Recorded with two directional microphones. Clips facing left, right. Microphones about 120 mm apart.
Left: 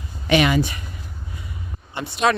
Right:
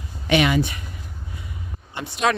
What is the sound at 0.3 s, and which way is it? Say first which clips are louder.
Speech: left 1 dB; 40° left (ahead or behind).